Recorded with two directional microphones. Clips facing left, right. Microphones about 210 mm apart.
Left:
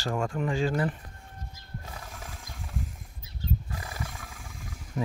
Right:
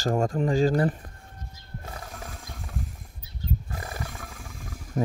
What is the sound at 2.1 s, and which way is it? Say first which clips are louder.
Mechanisms: right 4 dB; 50° right (ahead or behind).